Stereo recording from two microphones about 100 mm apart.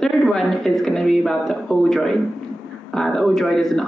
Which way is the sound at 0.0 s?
5° left (ahead or behind).